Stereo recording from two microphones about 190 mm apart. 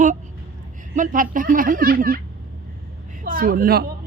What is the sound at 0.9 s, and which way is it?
Speech, 45° right (ahead or behind).